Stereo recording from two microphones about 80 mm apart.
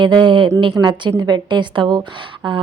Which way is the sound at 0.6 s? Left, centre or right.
Right.